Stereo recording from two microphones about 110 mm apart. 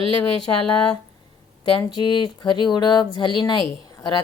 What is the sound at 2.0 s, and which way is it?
A woman's voice, 45° left (ahead or behind).